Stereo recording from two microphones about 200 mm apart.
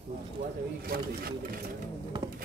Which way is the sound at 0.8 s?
50° right (ahead or behind).